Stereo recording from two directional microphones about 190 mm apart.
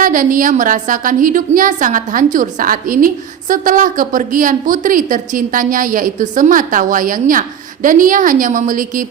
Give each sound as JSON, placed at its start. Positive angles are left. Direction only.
{"t": 0.0, "sound": "a woman's voice", "side_deg": -45}